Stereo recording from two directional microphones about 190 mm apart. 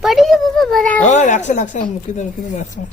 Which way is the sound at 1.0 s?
40° left (ahead or behind).